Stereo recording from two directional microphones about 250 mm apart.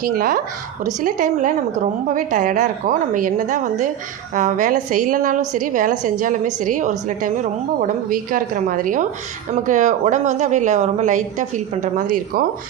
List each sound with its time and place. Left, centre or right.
0.0 s a woman's voice: right